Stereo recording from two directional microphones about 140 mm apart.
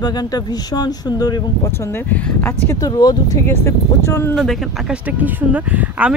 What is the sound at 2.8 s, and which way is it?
Speech, 25° left (ahead or behind).